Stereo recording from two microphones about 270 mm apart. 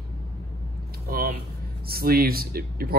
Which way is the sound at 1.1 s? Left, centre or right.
Right.